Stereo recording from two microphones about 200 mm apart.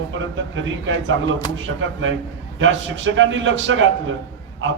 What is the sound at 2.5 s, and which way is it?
A man's voice, 70° right (ahead or behind).